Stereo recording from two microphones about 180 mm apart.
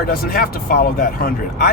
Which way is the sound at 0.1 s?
55° left (ahead or behind).